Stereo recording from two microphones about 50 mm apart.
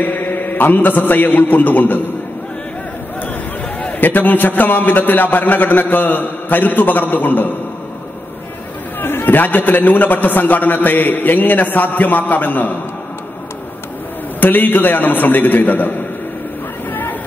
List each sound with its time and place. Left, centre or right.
0.0 s a man's voice: left
4.0 s a man's voice: left
9.0 s a man's voice: left
14.4 s a man's voice: left